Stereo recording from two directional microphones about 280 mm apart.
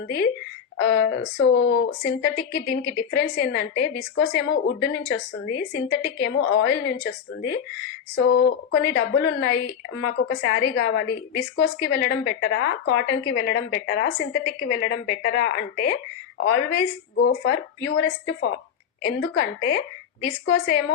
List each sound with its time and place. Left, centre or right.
1.4 s a woman's voice: left
8.3 s a woman's voice: left